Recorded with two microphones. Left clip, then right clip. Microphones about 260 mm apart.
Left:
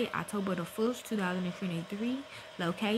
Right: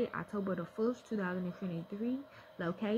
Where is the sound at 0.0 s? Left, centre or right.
Left.